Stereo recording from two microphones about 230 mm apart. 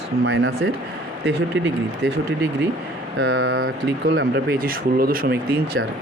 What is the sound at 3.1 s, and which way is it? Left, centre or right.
Speech, right.